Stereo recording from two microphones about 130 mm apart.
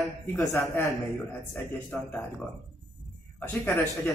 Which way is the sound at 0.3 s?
20° left (ahead or behind).